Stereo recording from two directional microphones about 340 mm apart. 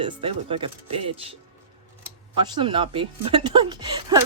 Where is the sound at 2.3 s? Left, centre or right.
Centre.